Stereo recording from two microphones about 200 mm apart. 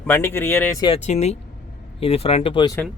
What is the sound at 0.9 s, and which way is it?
Speech, 35° left (ahead or behind).